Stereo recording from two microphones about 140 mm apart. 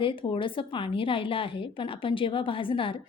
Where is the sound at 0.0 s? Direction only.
35° left (ahead or behind).